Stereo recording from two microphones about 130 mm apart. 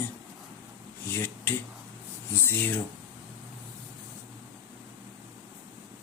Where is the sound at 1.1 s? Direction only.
15° left (ahead or behind).